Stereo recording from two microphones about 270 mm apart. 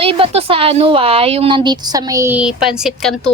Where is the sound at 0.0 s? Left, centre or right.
Right.